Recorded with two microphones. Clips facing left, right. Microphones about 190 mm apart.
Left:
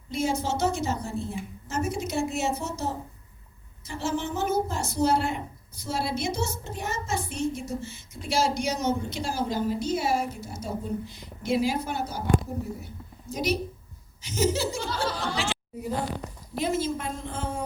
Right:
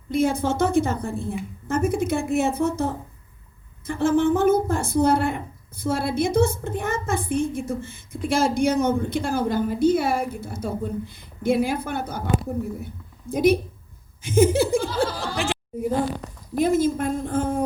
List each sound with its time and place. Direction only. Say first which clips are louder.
0.1 s a woman's voice: right 6 dB; 55° right (ahead or behind)
13.3 s a woman's voice: right 9 dB; 55° right (ahead or behind)